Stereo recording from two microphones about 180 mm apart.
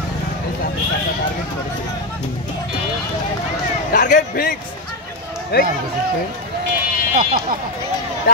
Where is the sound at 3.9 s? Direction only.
45° left (ahead or behind).